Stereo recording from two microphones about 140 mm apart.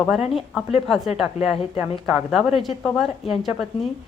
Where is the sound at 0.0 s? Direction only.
Centre (ahead or behind).